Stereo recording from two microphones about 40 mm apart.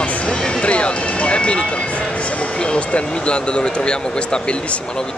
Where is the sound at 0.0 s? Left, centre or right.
Left.